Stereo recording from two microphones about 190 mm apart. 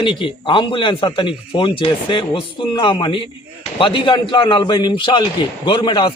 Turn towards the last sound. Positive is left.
turn(degrees=25)  # may be behind; listen again after turning